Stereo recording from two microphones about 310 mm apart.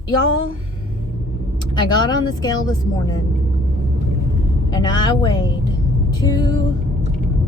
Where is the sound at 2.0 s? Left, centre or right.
Centre.